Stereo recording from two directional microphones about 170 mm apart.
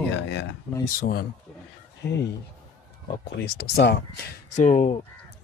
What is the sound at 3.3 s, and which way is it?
Speech, 75° left (ahead or behind).